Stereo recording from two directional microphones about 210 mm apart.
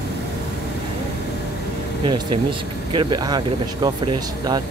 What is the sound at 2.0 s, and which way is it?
Speech, 25° right (ahead or behind).